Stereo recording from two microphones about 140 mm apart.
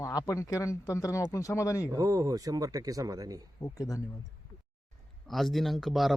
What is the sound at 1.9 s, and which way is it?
Speech, 25° right (ahead or behind).